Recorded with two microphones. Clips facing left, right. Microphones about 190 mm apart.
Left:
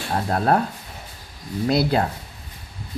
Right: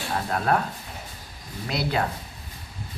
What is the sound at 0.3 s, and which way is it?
Speech, 35° left (ahead or behind).